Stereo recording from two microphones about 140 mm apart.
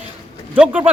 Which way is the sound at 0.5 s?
10° right (ahead or behind).